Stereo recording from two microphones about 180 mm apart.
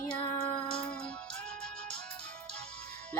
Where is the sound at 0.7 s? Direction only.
5° left (ahead or behind).